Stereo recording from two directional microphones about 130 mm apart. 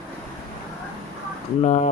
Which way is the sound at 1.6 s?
60° left (ahead or behind).